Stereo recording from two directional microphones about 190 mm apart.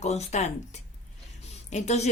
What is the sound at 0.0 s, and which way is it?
Speech, 35° left (ahead or behind).